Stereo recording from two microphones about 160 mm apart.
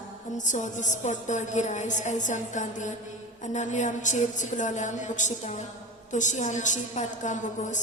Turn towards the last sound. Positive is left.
turn(degrees=50)  # may be behind; listen again after turning